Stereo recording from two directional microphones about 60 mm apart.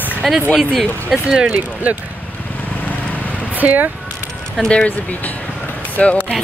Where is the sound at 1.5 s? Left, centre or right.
Right.